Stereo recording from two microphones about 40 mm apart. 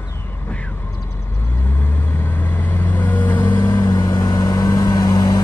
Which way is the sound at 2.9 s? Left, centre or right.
Left.